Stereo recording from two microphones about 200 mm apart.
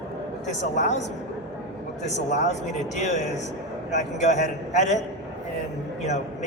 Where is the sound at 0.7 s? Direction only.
35° left (ahead or behind).